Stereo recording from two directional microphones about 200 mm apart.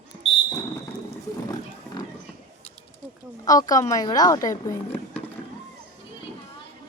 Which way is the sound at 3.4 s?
15° left (ahead or behind).